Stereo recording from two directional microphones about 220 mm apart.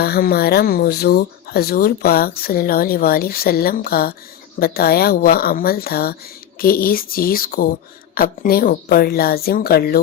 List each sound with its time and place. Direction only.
0.0 s speech: 45° left (ahead or behind)